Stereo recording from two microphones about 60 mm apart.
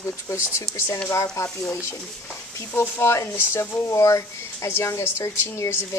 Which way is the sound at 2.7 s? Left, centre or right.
Left.